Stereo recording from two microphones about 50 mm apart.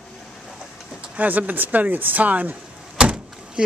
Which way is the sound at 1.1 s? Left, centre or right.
Right.